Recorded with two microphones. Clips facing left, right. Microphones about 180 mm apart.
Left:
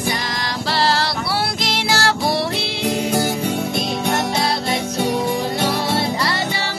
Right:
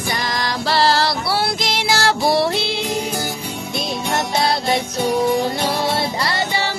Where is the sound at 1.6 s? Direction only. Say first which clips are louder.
Right 1 dB; 15° right (ahead or behind).